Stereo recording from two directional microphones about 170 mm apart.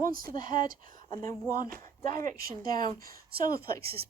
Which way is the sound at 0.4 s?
55° right (ahead or behind).